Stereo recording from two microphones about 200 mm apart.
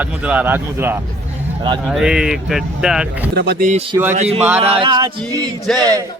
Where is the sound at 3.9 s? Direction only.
10° right (ahead or behind).